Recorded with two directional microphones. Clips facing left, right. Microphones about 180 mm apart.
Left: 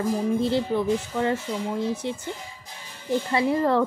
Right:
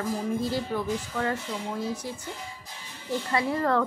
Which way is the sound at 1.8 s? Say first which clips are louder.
Left 5 dB; 25° left (ahead or behind).